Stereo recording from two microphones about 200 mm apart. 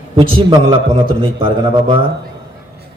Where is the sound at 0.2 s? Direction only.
25° right (ahead or behind).